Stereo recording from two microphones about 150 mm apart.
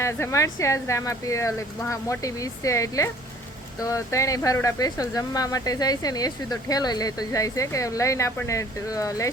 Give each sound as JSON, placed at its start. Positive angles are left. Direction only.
{"t": 0.0, "sound": "speech", "side_deg": 15}